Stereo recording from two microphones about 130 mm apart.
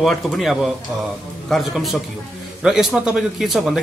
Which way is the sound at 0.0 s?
Centre (ahead or behind).